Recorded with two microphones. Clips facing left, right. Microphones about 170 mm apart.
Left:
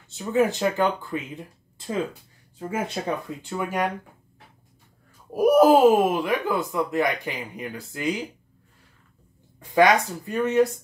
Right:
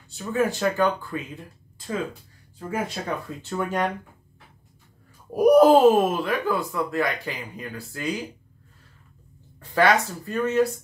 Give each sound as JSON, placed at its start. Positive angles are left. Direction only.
{"t": 0.1, "sound": "speech", "side_deg": 20}
{"t": 3.0, "sound": "speech", "side_deg": 25}
{"t": 3.4, "sound": "speech", "side_deg": 10}
{"t": 5.3, "sound": "speech", "side_deg": 0}
{"t": 9.6, "sound": "speech", "side_deg": 15}